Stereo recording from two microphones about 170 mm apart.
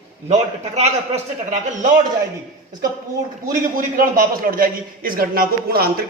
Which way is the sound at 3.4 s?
55° right (ahead or behind).